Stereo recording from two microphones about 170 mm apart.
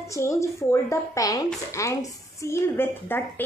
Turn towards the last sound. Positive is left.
turn(degrees=10)  # may be behind; listen again after turning